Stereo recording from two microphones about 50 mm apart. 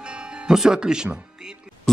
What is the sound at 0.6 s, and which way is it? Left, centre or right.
Speech, centre.